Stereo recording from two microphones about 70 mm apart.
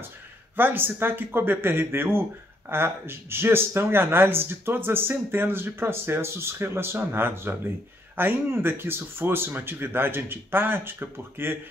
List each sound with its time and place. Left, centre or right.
0.6 s speech: right